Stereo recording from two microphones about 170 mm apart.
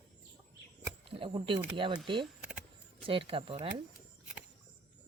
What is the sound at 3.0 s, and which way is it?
Speech, 30° right (ahead or behind).